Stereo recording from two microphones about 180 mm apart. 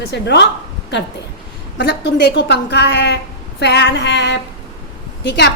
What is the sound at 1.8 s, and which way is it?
A woman's voice, 70° left (ahead or behind).